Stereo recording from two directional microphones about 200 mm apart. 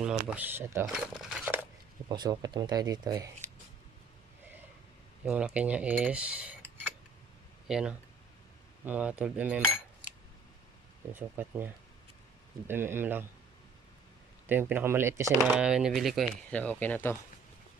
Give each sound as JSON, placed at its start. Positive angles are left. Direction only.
{"t": 0.0, "sound": "speech", "side_deg": -5}
{"t": 2.0, "sound": "speech", "side_deg": -20}
{"t": 5.2, "sound": "cutlery", "side_deg": -5}
{"t": 7.6, "sound": "speech", "side_deg": -5}
{"t": 8.8, "sound": "cutlery", "side_deg": -10}
{"t": 11.1, "sound": "cutlery", "side_deg": -10}
{"t": 14.5, "sound": "cutlery", "side_deg": -10}
{"t": 15.5, "sound": "speech", "side_deg": -5}